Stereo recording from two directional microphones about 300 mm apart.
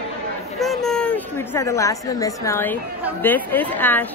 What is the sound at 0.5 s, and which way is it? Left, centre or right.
Speech, centre.